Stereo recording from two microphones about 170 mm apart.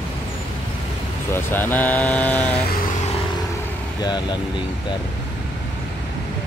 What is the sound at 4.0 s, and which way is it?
Speech, 25° left (ahead or behind).